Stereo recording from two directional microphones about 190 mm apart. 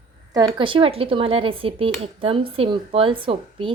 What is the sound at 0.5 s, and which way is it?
Speech, 25° right (ahead or behind).